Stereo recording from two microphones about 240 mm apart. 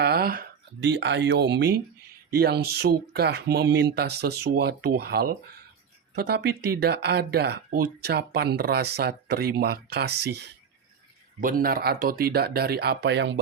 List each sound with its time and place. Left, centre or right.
0.0 s speech: right